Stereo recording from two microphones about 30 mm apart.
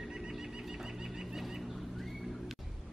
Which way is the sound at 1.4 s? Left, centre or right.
Centre.